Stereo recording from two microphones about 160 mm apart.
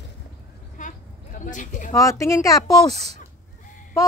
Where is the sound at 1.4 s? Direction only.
55° left (ahead or behind).